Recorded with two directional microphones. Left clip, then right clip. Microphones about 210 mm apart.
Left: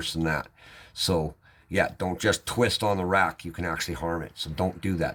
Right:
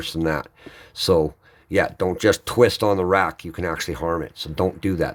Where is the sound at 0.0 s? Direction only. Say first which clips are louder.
Right 5 dB; 40° right (ahead or behind).